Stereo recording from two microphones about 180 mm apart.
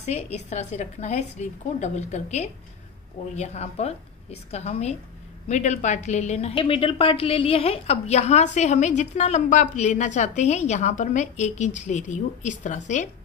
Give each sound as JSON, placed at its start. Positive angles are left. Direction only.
{"t": 0.0, "sound": "a woman's voice", "side_deg": 40}